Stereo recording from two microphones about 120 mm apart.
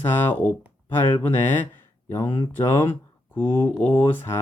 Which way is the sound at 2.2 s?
45° left (ahead or behind).